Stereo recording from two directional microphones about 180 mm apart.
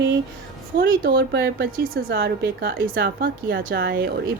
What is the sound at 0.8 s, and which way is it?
A woman's voice, 65° right (ahead or behind).